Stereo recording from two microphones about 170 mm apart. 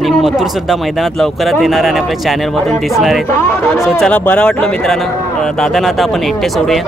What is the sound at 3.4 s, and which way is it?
Speech, 10° left (ahead or behind).